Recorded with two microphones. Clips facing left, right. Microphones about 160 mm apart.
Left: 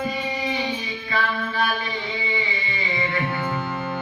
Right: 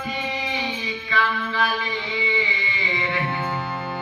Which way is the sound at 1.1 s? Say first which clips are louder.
Even; 40° left (ahead or behind).